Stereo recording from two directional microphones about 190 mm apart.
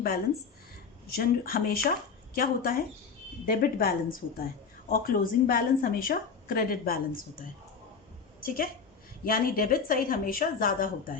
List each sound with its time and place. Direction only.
1.0 s a woman's voice: 50° left (ahead or behind)